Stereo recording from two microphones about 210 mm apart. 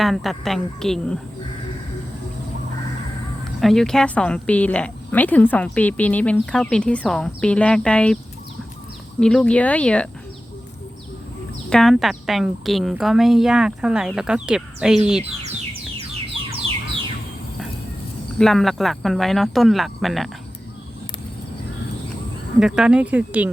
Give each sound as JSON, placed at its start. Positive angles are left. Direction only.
{"t": 0.0, "sound": "a woman's voice", "side_deg": 0}
{"t": 3.6, "sound": "a woman's voice", "side_deg": 0}
{"t": 9.2, "sound": "a woman's voice", "side_deg": 5}
{"t": 11.7, "sound": "a woman's voice", "side_deg": 0}
{"t": 16.0, "sound": "a sound", "side_deg": -25}
{"t": 18.3, "sound": "a woman's voice", "side_deg": 0}
{"t": 22.6, "sound": "speech", "side_deg": -5}